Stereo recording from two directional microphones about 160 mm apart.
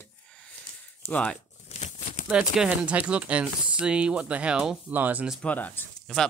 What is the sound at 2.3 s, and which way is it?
Speech, 5° right (ahead or behind).